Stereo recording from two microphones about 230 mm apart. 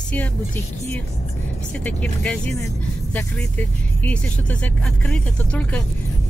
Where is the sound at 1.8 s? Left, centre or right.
Centre.